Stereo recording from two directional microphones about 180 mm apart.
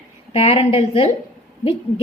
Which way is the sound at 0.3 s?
35° left (ahead or behind).